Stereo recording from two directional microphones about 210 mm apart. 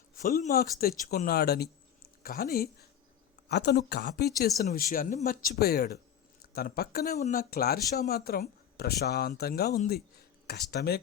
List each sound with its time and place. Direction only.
0.1 s speech: 40° left (ahead or behind)